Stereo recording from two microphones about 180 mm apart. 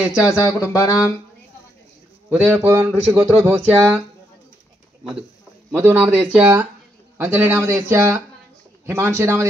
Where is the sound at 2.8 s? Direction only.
10° right (ahead or behind).